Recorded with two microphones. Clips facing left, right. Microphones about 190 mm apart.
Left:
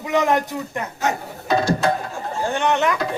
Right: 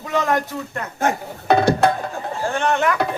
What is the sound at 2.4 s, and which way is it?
Speech, 20° left (ahead or behind).